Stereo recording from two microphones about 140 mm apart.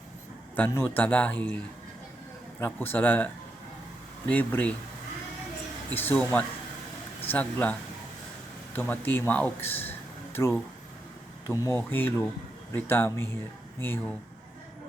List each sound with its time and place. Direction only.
0.5 s speech: 15° left (ahead or behind)
2.6 s speech: 15° left (ahead or behind)
4.3 s speech: 10° left (ahead or behind)
5.9 s speech: 15° left (ahead or behind)